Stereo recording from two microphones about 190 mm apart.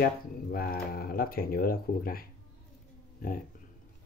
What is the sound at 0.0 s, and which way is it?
Speech, 50° left (ahead or behind).